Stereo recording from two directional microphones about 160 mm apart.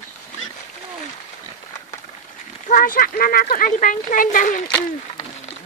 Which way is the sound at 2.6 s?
60° left (ahead or behind).